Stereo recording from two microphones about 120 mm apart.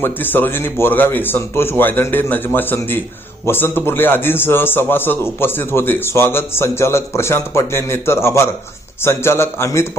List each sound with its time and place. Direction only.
0.0 s a man's voice: 15° left (ahead or behind)